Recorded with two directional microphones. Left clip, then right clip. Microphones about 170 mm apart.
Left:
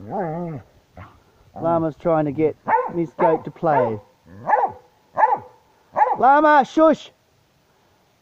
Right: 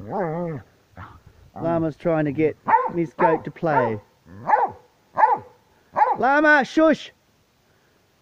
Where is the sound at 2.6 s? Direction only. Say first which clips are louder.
Right 3 dB; 5° left (ahead or behind).